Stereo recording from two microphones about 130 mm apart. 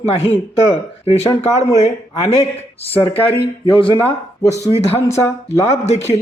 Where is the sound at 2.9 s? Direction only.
15° left (ahead or behind).